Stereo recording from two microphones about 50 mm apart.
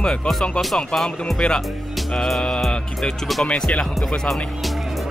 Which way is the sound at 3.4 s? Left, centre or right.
Left.